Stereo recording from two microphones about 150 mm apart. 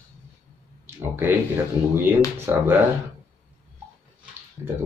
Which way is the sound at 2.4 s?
15° right (ahead or behind).